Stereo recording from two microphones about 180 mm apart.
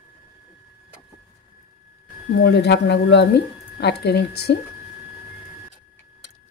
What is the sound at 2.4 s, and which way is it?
Speech, 70° left (ahead or behind).